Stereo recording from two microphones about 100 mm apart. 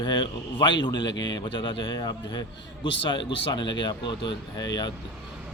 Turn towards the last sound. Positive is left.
turn(degrees=45)  # may be behind; listen again after turning